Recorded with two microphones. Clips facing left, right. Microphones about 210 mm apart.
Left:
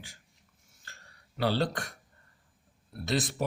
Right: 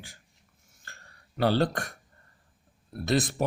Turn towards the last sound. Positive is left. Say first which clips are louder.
# right 4 dB
turn(degrees=-50)  # may be behind; listen again after turning